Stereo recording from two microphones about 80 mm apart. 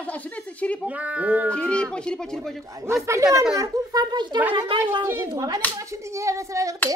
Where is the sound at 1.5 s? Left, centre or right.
Centre.